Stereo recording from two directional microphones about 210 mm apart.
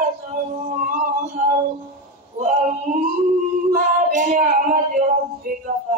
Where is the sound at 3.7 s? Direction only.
40° right (ahead or behind).